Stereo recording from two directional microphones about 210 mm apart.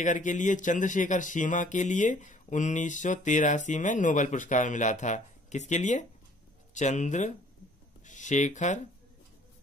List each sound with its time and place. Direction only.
0.0 s speech: 35° left (ahead or behind)